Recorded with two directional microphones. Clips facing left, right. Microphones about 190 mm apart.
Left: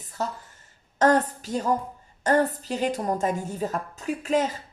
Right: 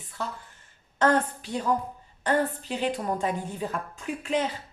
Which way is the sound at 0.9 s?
40° left (ahead or behind).